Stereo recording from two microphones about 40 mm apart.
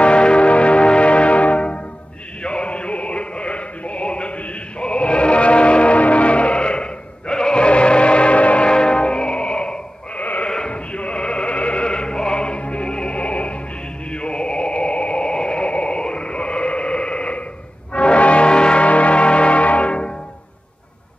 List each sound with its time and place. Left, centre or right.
0.0 s music: left
8.6 s music: left
10.4 s bleat: left
10.7 s music: left
14.1 s radio: left
17.9 s music: left